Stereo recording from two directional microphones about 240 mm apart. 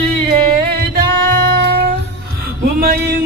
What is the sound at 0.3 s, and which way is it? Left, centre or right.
Music, right.